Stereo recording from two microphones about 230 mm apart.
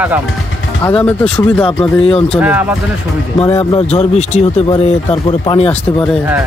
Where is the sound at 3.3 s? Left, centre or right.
Left.